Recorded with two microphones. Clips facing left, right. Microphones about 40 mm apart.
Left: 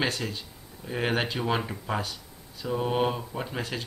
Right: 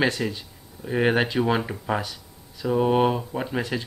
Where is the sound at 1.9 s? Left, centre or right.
Right.